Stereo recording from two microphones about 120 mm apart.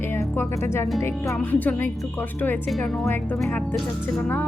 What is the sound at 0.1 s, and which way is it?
Speech, 20° left (ahead or behind).